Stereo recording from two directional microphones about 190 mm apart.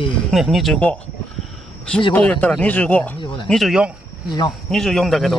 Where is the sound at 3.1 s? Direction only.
25° left (ahead or behind).